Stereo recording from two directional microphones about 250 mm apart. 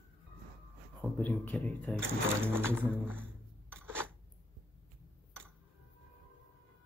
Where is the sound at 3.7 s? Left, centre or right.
Centre.